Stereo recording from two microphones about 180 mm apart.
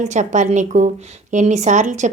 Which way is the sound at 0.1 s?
40° right (ahead or behind).